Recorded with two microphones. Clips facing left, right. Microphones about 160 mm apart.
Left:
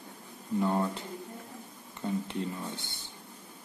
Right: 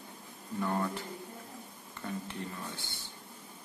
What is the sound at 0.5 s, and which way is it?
Speech, 20° left (ahead or behind).